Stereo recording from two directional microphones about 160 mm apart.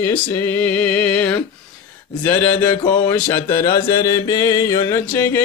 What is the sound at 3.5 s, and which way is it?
Mantra, 20° left (ahead or behind).